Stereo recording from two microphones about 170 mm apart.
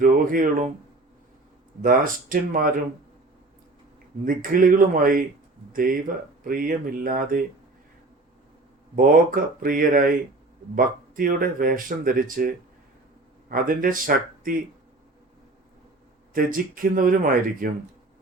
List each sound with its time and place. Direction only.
0.0 s speech: 55° right (ahead or behind)
1.8 s speech: 55° right (ahead or behind)
4.3 s speech: 55° right (ahead or behind)
6.4 s speech: 55° right (ahead or behind)
9.0 s speech: 55° right (ahead or behind)
13.5 s speech: 55° right (ahead or behind)
16.3 s speech: 55° right (ahead or behind)